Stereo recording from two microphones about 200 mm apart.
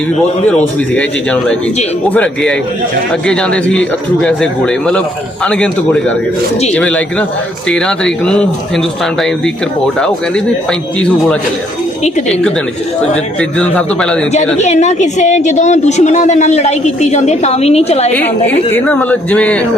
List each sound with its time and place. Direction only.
0.4 s speech: 5° left (ahead or behind)
10.0 s speech: 5° left (ahead or behind)
13.6 s speech: 5° left (ahead or behind)
14.6 s a woman's voice: 35° left (ahead or behind)
18.1 s speech: 10° left (ahead or behind)